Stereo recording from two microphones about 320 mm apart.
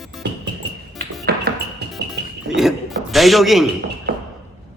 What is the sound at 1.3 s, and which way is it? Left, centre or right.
Music, right.